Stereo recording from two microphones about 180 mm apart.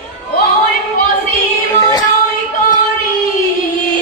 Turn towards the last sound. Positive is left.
turn(degrees=20)  # may be behind; listen again after turning